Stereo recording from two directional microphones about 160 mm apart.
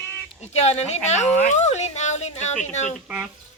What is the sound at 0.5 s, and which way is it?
Speech, 40° left (ahead or behind).